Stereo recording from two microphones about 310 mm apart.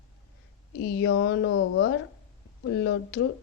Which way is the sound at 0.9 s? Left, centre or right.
Left.